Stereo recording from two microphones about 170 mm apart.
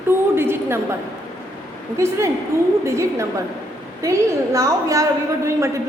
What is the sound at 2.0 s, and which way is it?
A woman's voice, 15° right (ahead or behind).